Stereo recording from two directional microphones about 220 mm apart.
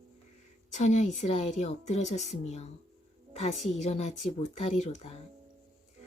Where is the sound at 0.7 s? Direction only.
30° left (ahead or behind).